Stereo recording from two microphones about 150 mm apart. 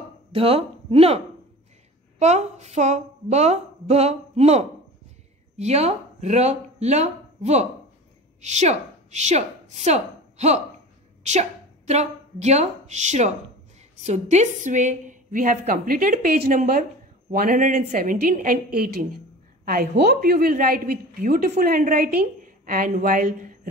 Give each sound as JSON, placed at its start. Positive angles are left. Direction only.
{"t": 0.3, "sound": "a woman's voice", "side_deg": -40}
{"t": 18.1, "sound": "a woman's voice", "side_deg": -70}